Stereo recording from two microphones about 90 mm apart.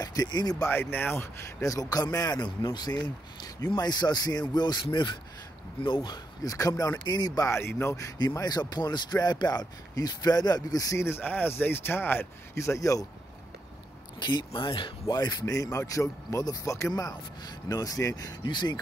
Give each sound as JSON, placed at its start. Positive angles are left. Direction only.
{"t": 0.0, "sound": "speech", "side_deg": 45}
{"t": 0.7, "sound": "speech", "side_deg": 20}
{"t": 4.8, "sound": "speech", "side_deg": 70}
{"t": 7.4, "sound": "speech", "side_deg": 30}
{"t": 8.4, "sound": "speech", "side_deg": 50}
{"t": 11.1, "sound": "speech", "side_deg": 25}
{"t": 14.2, "sound": "speech", "side_deg": 60}